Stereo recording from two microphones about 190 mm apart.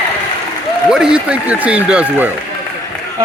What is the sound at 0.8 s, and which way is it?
A man's voice, 5° right (ahead or behind).